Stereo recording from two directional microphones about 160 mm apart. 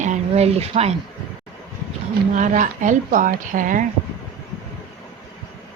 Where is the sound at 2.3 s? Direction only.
50° right (ahead or behind).